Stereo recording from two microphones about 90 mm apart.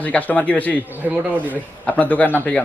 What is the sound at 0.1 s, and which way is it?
Speech, 15° left (ahead or behind).